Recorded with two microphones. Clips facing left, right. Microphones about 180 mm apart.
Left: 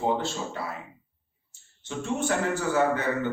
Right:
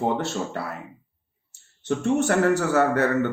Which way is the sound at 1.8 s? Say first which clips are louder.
Right 7 dB; 70° right (ahead or behind).